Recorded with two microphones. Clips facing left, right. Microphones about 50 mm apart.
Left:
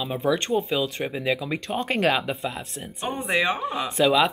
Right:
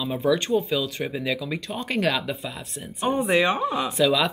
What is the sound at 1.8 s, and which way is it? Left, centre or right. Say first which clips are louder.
Speech: left 2 dB; left.